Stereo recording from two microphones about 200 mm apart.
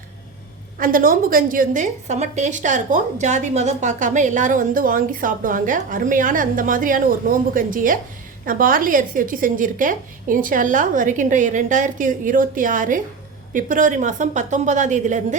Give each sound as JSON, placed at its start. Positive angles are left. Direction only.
{"t": 0.8, "sound": "a woman's voice", "side_deg": -45}